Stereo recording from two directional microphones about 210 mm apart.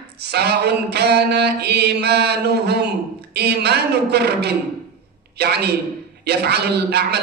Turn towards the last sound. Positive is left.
turn(degrees=-50)  # may be behind; listen again after turning